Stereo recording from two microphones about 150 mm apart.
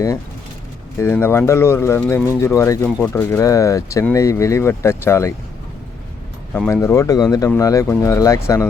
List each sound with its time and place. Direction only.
0.9 s speech: 15° left (ahead or behind)
6.7 s speech: 20° left (ahead or behind)